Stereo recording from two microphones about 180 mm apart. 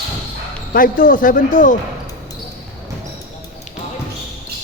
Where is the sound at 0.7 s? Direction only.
50° left (ahead or behind).